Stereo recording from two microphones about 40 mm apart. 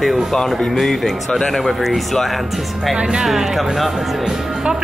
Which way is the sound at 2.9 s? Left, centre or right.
Right.